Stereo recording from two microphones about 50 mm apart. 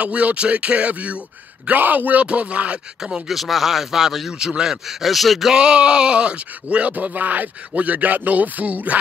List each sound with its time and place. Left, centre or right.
0.0 s speech: right
3.0 s speech: centre
3.3 s speech: centre
5.5 s speech: centre